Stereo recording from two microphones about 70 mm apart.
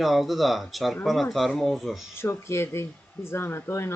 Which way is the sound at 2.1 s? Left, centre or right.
Left.